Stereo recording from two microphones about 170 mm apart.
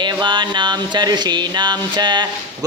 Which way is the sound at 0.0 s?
25° right (ahead or behind).